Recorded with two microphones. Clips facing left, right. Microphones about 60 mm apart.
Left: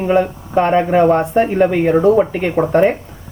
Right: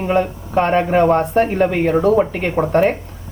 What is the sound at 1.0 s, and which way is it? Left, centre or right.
Speech, centre.